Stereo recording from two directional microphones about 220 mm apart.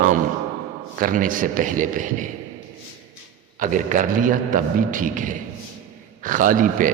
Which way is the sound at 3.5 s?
35° right (ahead or behind).